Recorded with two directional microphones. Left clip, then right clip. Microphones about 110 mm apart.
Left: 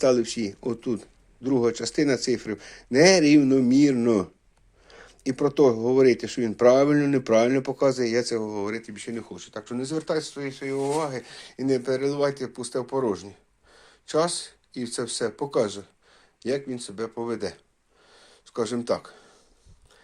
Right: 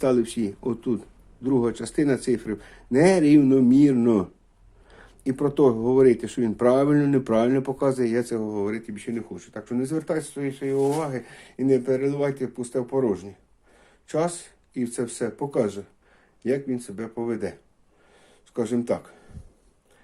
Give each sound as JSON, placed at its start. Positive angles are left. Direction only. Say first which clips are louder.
{"t": 0.0, "sound": "speech", "louder": "left 1 dB", "side_deg": 15}